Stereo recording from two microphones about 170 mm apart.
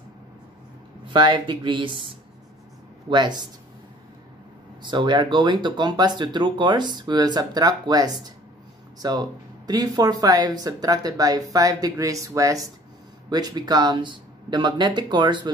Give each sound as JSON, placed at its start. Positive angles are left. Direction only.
{"t": 1.1, "sound": "speech", "side_deg": -30}
{"t": 4.8, "sound": "speech", "side_deg": -25}